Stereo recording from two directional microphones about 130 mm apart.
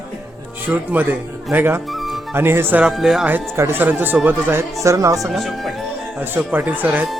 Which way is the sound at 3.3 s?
15° right (ahead or behind).